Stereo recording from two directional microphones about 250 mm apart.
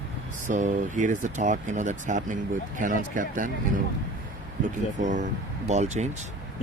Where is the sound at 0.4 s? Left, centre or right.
Right.